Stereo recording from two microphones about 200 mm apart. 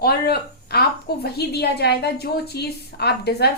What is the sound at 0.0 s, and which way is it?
A woman's voice, 50° left (ahead or behind).